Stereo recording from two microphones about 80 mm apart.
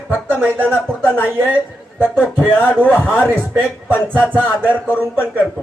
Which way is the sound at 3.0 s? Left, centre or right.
Centre.